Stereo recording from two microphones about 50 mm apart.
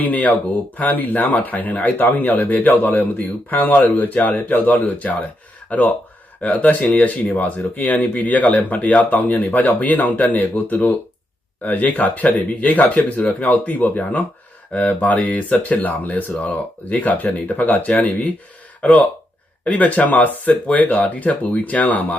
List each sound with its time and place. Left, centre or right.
0.0 s speech: left